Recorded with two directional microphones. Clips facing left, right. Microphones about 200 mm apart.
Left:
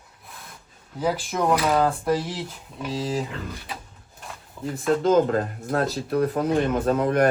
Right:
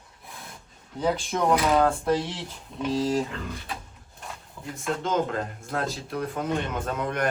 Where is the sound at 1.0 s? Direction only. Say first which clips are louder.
Left 1 dB; 5° left (ahead or behind).